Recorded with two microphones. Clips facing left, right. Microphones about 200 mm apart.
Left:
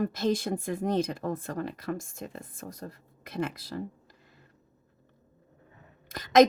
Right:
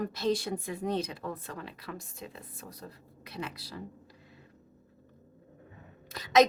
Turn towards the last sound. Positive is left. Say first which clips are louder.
# left 4 dB
turn(degrees=50)  # may be behind; listen again after turning